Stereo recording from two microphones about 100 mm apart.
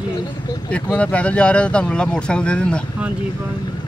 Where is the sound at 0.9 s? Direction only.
15° left (ahead or behind).